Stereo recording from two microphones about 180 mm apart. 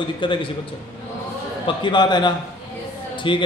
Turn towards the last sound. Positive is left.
turn(degrees=30)  # may be behind; listen again after turning